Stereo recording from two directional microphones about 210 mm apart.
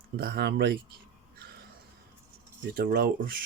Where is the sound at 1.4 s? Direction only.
50° right (ahead or behind).